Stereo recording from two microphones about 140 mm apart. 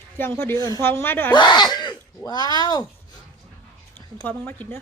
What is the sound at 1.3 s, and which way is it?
Speech, 30° left (ahead or behind).